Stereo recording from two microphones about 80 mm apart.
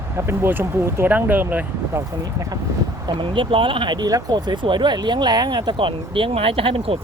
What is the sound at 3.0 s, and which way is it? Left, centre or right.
Speech, right.